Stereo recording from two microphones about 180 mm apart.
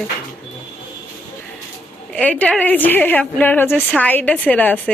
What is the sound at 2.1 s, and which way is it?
Speech, 5° left (ahead or behind).